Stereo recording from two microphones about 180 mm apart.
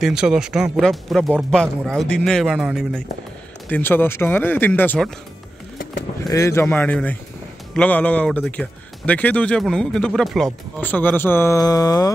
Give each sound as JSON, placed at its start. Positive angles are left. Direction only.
{"t": 0.0, "sound": "speech", "side_deg": -5}
{"t": 6.2, "sound": "speech", "side_deg": 15}